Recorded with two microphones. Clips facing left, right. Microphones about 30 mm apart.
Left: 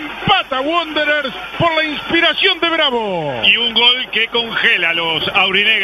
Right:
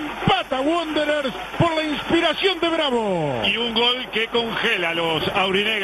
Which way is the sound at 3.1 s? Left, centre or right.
Centre.